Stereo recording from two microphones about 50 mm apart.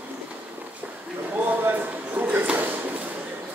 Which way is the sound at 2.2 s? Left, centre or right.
Right.